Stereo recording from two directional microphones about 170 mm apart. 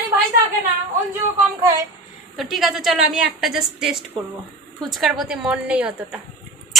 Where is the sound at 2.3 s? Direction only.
Centre (ahead or behind).